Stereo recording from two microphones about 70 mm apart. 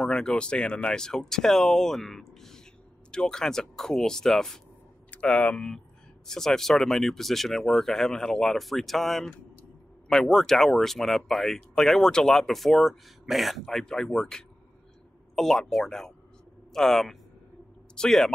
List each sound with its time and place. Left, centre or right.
0.0 s speech: centre
5.1 s speech: centre
15.3 s speech: centre